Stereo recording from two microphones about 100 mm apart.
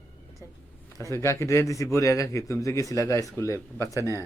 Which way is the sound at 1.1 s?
25° left (ahead or behind).